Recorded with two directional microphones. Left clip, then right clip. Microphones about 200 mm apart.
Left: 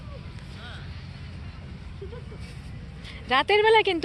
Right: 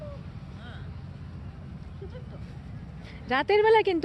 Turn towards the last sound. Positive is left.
turn(degrees=-15)  # may be behind; listen again after turning